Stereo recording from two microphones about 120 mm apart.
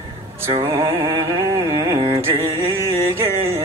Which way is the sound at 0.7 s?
25° right (ahead or behind).